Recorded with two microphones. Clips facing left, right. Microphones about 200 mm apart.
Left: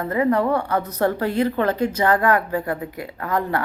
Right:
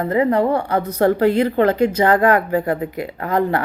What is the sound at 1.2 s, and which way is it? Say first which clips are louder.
Speech: right 5 dB; 90° right.